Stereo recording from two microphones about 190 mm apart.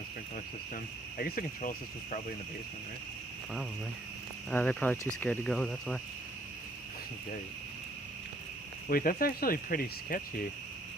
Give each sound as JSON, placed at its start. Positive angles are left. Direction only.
{"t": 1.2, "sound": "speech", "side_deg": 45}
{"t": 4.5, "sound": "speech", "side_deg": 10}
{"t": 8.9, "sound": "speech", "side_deg": 50}